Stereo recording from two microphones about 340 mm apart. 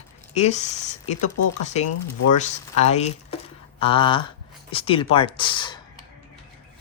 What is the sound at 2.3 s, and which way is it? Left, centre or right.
Speech, centre.